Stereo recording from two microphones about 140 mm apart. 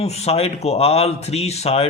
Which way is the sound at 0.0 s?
45° left (ahead or behind).